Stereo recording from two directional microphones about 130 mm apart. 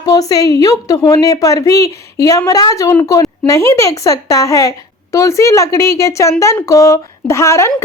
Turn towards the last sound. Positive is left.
turn(degrees=20)  # may be behind; listen again after turning